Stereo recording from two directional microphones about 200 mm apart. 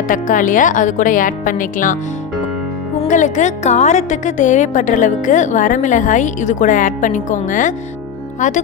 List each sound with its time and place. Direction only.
0.1 s a woman's voice: 40° left (ahead or behind)
3.0 s a woman's voice: 40° left (ahead or behind)